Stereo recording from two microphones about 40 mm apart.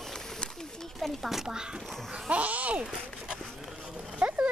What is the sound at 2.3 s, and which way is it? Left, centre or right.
Speech, right.